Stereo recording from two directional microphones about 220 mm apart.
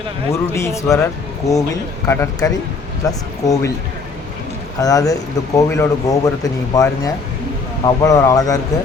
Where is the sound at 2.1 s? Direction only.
10° left (ahead or behind).